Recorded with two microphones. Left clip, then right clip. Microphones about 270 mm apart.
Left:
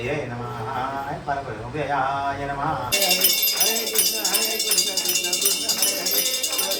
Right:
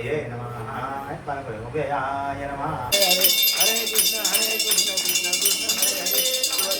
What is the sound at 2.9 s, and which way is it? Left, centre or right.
Music, centre.